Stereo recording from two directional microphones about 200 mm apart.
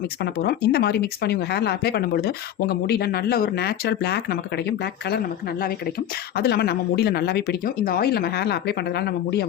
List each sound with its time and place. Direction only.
0.2 s speech: 55° left (ahead or behind)